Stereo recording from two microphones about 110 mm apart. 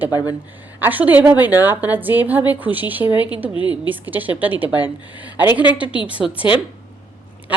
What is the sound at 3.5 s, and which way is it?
Speech, 45° left (ahead or behind).